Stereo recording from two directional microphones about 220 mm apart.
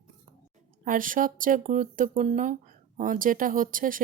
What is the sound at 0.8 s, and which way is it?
Speech, 40° right (ahead or behind).